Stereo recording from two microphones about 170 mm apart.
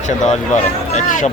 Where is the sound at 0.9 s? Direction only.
50° left (ahead or behind).